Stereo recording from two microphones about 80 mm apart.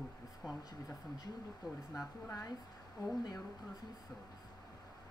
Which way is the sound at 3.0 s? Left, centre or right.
Left.